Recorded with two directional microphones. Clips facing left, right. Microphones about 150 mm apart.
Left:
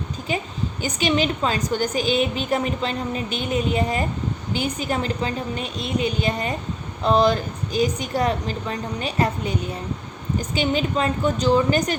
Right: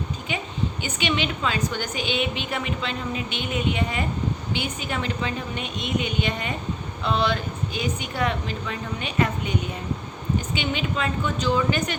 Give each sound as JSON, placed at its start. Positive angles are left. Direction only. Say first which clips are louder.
{"t": 0.8, "sound": "a woman's voice", "louder": "left 6 dB", "side_deg": 40}